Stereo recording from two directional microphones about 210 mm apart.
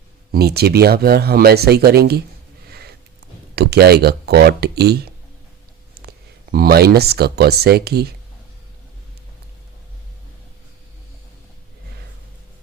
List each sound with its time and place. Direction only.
0.3 s speech: 50° right (ahead or behind)
2.6 s a sound: 50° right (ahead or behind)
3.5 s speech: 50° right (ahead or behind)
6.5 s speech: 45° right (ahead or behind)